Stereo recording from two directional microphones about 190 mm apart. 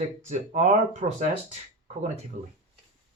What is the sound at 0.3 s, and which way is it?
Speech, 40° right (ahead or behind).